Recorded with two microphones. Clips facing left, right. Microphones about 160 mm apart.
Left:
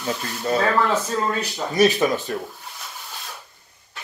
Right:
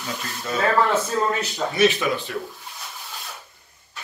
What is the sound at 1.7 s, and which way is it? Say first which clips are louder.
Speech: left 3 dB; 40° left (ahead or behind).